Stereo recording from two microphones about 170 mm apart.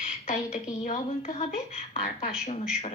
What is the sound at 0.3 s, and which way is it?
A woman's voice, 50° left (ahead or behind).